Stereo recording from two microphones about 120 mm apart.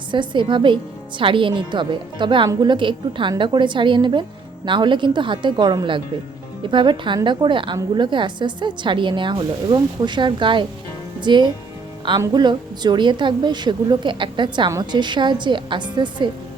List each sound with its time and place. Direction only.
0.1 s a woman's voice: 40° right (ahead or behind)